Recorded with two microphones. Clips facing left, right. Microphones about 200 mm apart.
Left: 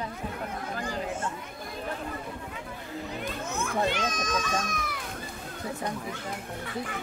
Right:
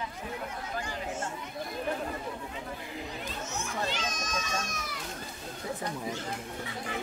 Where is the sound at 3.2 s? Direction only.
55° left (ahead or behind).